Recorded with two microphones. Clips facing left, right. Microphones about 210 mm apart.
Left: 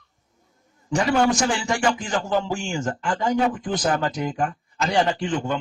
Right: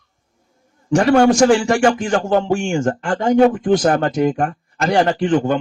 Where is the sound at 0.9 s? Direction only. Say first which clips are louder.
Right 8 dB; 55° right (ahead or behind).